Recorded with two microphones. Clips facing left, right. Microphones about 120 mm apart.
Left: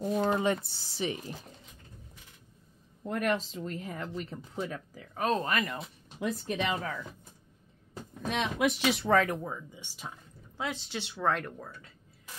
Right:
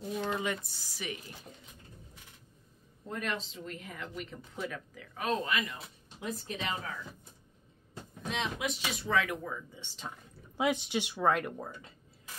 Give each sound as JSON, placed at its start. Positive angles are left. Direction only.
{"t": 0.0, "sound": "speech", "side_deg": 45}
{"t": 3.1, "sound": "speech", "side_deg": 55}
{"t": 6.1, "sound": "speech", "side_deg": 70}
{"t": 8.3, "sound": "speech", "side_deg": 65}
{"t": 9.1, "sound": "speech", "side_deg": 40}
{"t": 9.8, "sound": "speech", "side_deg": 10}
{"t": 10.6, "sound": "speech", "side_deg": -15}
{"t": 11.5, "sound": "speech", "side_deg": -20}